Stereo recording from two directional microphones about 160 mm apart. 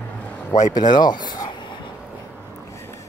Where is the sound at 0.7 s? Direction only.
25° left (ahead or behind).